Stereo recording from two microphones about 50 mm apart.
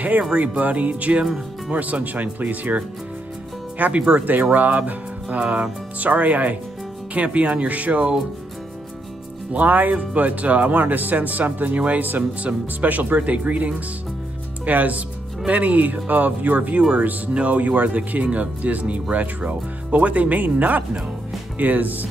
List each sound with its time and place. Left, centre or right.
0.4 s speech: right
9.5 s speech: right